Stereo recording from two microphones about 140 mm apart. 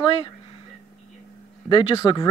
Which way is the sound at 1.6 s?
35° left (ahead or behind).